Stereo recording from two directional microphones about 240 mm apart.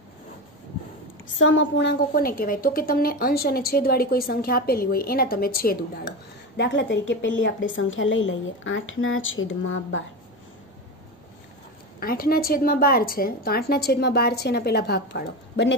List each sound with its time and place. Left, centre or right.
1.4 s a woman's voice: left
12.0 s a woman's voice: left